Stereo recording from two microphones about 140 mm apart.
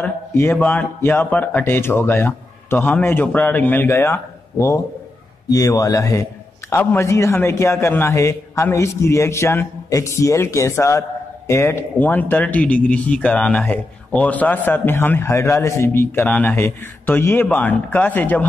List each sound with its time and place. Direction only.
0.0 s a man's voice: 15° left (ahead or behind)